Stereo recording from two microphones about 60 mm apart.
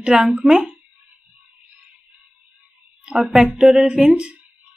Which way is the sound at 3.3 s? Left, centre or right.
Centre.